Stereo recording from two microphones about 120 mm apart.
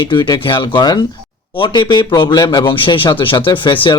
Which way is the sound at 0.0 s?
40° left (ahead or behind).